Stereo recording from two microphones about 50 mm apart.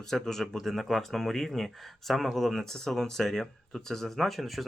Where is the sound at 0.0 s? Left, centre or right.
Centre.